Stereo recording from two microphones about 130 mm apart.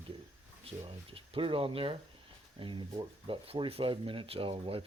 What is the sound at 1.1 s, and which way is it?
Speech, 45° right (ahead or behind).